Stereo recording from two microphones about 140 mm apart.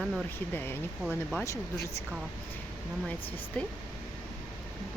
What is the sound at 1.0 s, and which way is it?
Speech, centre (ahead or behind).